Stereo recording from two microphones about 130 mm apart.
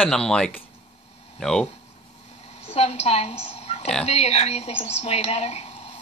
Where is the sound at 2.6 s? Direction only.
50° left (ahead or behind).